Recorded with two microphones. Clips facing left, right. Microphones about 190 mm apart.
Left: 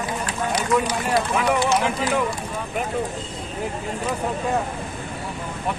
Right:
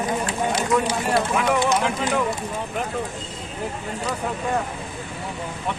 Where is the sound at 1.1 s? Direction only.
5° left (ahead or behind).